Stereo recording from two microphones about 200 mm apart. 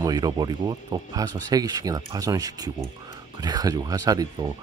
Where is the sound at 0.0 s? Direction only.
20° right (ahead or behind).